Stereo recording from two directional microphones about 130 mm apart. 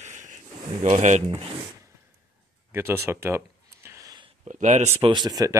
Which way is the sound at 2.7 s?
20° right (ahead or behind).